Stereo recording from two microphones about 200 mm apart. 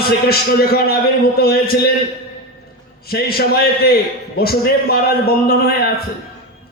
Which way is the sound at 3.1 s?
50° left (ahead or behind).